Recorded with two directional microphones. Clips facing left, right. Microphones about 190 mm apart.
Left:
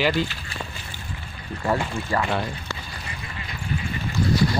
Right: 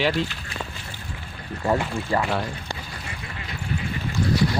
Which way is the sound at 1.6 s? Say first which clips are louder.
Right 1 dB; 20° right (ahead or behind).